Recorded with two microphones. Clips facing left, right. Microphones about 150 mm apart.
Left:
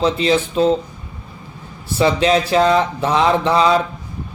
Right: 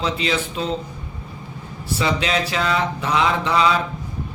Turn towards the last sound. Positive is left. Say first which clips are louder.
# left 4 dB
turn(degrees=35)  # may be behind; listen again after turning